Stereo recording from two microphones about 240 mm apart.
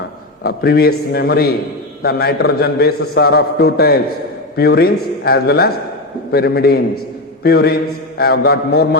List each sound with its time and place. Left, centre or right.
0.4 s a man's voice: left